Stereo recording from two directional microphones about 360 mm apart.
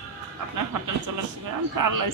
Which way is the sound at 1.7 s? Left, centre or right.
Right.